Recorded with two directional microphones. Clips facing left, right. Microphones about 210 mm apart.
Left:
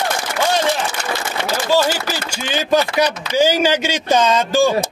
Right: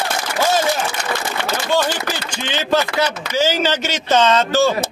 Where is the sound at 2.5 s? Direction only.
15° left (ahead or behind).